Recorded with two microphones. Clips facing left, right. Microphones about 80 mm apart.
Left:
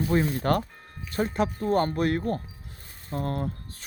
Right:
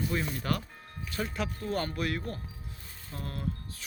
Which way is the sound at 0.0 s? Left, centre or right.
Left.